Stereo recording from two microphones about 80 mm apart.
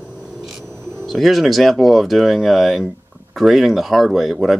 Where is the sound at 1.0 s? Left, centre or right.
Centre.